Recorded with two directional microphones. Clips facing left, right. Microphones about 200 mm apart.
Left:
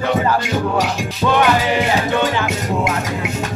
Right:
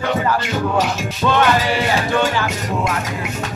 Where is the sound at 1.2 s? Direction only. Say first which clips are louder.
Left 1 dB; 15° left (ahead or behind).